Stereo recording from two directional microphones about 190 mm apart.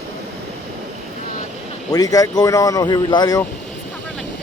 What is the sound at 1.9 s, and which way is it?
Speech, 20° left (ahead or behind).